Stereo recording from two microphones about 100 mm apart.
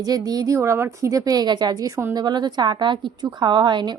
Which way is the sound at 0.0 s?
40° right (ahead or behind).